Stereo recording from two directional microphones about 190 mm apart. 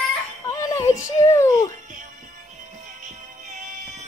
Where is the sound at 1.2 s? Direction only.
15° left (ahead or behind).